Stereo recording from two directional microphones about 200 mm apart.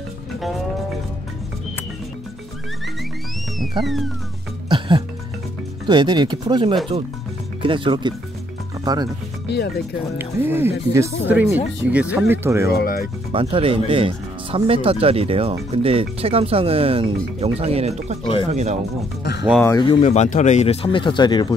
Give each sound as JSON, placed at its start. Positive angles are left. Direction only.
{"t": 3.8, "sound": "speech", "side_deg": 0}
{"t": 4.6, "sound": "music", "side_deg": -25}
{"t": 5.9, "sound": "speech", "side_deg": -20}
{"t": 10.1, "sound": "speech", "side_deg": -10}
{"t": 12.7, "sound": "speech", "side_deg": 45}
{"t": 13.3, "sound": "speech", "side_deg": -25}
{"t": 18.2, "sound": "speech", "side_deg": 25}
{"t": 18.5, "sound": "speech", "side_deg": -35}
{"t": 20.0, "sound": "speech", "side_deg": 35}